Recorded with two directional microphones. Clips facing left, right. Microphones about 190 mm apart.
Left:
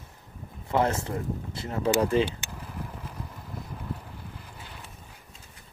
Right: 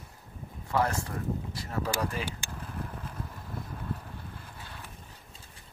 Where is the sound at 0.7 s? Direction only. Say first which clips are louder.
Left 4 dB; 25° left (ahead or behind).